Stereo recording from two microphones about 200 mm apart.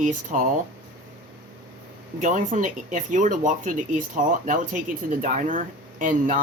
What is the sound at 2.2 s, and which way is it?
Speech, 40° right (ahead or behind).